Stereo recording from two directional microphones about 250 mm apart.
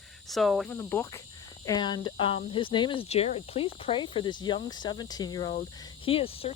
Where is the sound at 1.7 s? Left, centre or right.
Centre.